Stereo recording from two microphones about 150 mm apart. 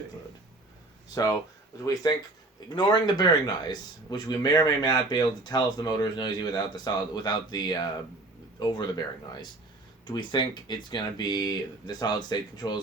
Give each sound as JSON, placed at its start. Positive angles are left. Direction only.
{"t": 1.1, "sound": "speech", "side_deg": 25}